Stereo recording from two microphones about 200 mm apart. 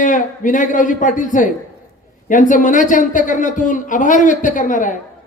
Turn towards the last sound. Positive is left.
turn(degrees=40)  # may be behind; listen again after turning